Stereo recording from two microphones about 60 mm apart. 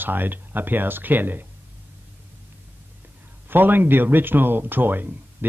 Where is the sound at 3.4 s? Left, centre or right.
Right.